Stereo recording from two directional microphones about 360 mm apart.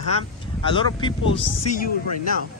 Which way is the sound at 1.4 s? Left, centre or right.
Left.